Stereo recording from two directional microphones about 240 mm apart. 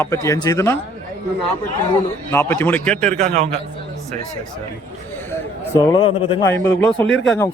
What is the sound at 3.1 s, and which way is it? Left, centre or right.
Speech, right.